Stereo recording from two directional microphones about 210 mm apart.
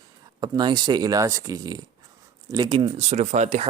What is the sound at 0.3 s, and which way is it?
Speech, 20° right (ahead or behind).